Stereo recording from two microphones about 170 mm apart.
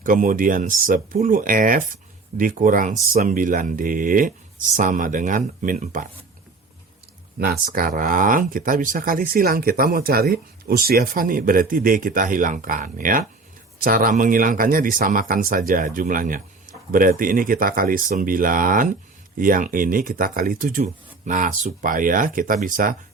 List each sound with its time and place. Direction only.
0.0 s speech: 50° right (ahead or behind)
7.3 s speech: 65° right (ahead or behind)